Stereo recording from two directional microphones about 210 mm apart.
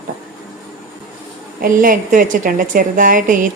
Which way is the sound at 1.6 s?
40° right (ahead or behind).